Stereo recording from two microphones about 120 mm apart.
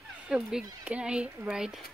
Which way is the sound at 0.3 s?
5° right (ahead or behind).